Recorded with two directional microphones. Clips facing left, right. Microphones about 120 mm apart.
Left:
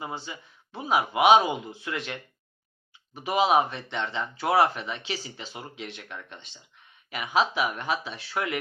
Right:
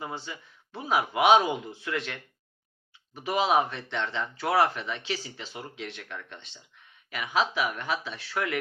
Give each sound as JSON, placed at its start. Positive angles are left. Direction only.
{"t": 0.0, "sound": "speech", "side_deg": 10}
{"t": 3.2, "sound": "speech", "side_deg": 15}
{"t": 7.1, "sound": "speech", "side_deg": 20}